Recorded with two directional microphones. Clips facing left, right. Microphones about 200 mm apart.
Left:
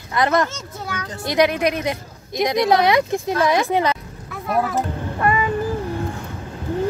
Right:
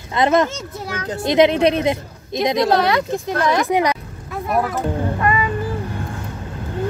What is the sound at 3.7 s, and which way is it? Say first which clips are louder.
Speech: right 2 dB; 15° right (ahead or behind).